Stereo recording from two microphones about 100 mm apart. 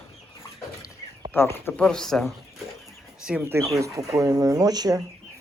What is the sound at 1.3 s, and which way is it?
Speech, 25° left (ahead or behind).